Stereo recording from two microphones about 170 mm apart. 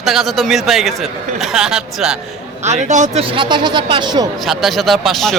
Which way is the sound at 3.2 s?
30° right (ahead or behind).